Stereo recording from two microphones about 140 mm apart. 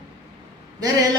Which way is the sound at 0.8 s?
25° right (ahead or behind).